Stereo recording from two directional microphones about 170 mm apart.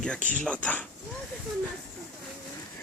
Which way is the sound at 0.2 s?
50° left (ahead or behind).